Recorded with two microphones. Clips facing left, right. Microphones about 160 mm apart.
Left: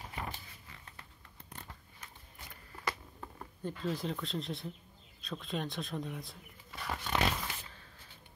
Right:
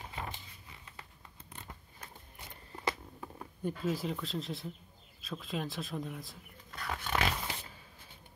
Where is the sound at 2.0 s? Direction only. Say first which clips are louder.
Right 4 dB; 25° right (ahead or behind).